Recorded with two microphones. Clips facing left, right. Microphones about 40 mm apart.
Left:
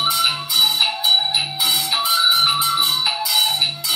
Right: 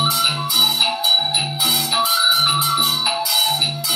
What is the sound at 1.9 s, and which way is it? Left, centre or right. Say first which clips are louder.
Music: right 1 dB; left.